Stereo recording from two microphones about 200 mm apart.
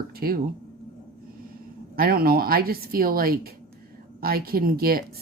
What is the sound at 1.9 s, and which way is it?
A woman's voice, 50° right (ahead or behind).